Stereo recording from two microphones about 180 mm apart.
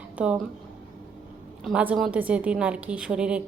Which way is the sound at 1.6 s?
5° right (ahead or behind).